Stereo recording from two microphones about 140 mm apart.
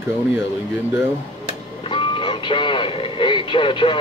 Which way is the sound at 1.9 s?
35° left (ahead or behind).